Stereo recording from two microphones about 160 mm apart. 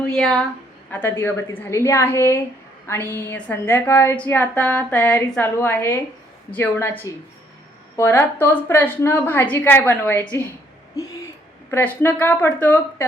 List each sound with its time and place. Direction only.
0.0 s a woman's voice: 5° left (ahead or behind)
10.9 s hoot: 20° left (ahead or behind)
11.7 s a woman's voice: 10° left (ahead or behind)